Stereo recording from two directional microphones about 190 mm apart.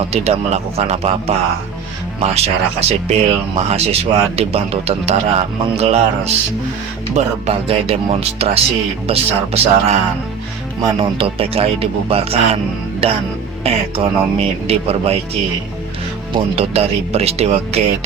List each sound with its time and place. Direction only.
0.1 s speech: 35° right (ahead or behind)
16.3 s speech: 30° right (ahead or behind)